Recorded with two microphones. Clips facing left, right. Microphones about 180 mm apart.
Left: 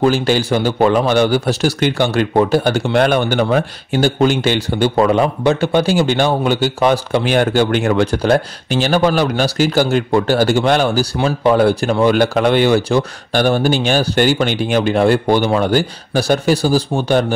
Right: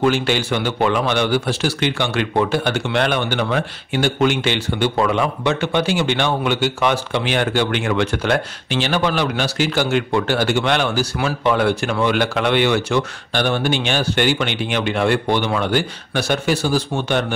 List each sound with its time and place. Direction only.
0.0 s a man's voice: 35° left (ahead or behind)